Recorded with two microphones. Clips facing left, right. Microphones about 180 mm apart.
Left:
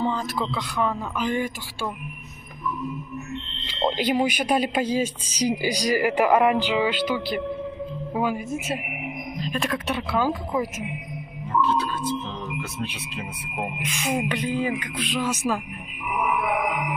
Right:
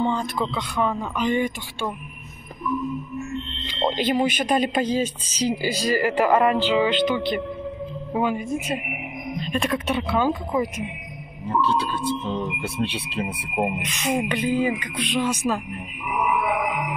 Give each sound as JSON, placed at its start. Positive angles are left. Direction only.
{"t": 0.0, "sound": "speech", "side_deg": 5}
{"t": 3.6, "sound": "speech", "side_deg": 10}
{"t": 11.6, "sound": "speech", "side_deg": -30}
{"t": 13.7, "sound": "speech", "side_deg": 10}
{"t": 14.4, "sound": "speech", "side_deg": -5}